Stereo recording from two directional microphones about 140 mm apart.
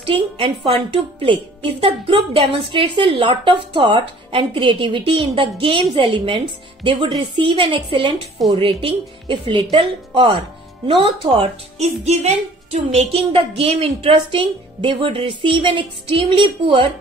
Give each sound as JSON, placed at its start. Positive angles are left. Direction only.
{"t": 0.0, "sound": "a woman's voice", "side_deg": -40}
{"t": 11.2, "sound": "a woman's voice", "side_deg": -50}
{"t": 13.1, "sound": "a woman's voice", "side_deg": -40}